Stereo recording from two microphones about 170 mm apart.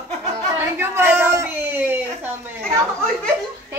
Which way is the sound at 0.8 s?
15° right (ahead or behind).